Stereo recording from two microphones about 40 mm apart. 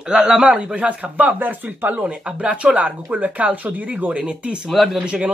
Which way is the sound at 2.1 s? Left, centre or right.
Right.